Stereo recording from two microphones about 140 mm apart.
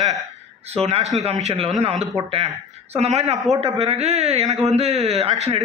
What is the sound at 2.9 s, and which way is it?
A man's voice, 50° right (ahead or behind).